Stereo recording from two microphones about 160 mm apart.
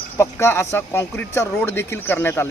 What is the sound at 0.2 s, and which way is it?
Speech, 15° left (ahead or behind).